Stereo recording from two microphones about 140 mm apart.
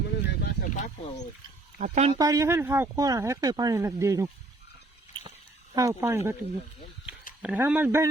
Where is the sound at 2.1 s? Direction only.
25° right (ahead or behind).